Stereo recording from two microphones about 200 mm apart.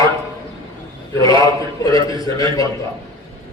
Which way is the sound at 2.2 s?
20° left (ahead or behind).